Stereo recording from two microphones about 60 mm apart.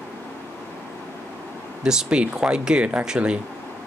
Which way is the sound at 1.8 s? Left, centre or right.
Centre.